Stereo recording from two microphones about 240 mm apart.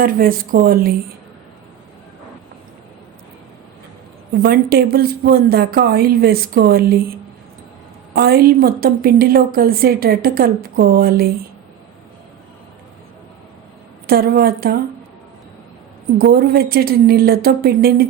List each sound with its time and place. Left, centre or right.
0.0 s a woman's voice: right
4.4 s a woman's voice: right
8.1 s a woman's voice: right
14.1 s a woman's voice: right
16.1 s a woman's voice: right